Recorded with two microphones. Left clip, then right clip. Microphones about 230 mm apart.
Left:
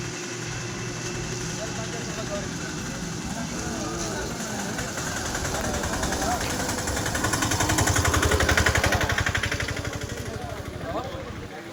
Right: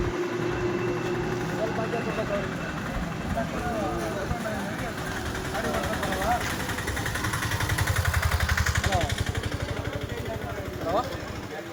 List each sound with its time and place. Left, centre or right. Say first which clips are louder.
8.0 s vehicle: left 6 dB; left
8.8 s vehicle: left 3 dB; left